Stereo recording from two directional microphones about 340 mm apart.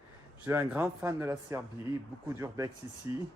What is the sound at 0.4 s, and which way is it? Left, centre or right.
Speech, centre.